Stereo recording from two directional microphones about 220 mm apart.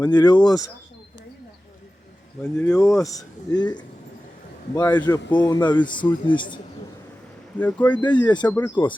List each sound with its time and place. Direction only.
0.0 s speech: 20° left (ahead or behind)
2.4 s speech: 5° left (ahead or behind)
7.6 s speech: 5° left (ahead or behind)
8.0 s speech: 20° left (ahead or behind)
8.4 s speech: 10° left (ahead or behind)